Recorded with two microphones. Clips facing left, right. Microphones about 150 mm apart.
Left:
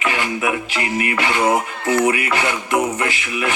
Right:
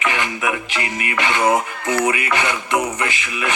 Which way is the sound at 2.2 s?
20° right (ahead or behind).